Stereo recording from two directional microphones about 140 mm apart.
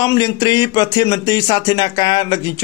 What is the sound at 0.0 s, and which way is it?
Speech, 30° left (ahead or behind).